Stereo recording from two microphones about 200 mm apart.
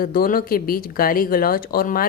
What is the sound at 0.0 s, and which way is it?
Speech, 45° left (ahead or behind).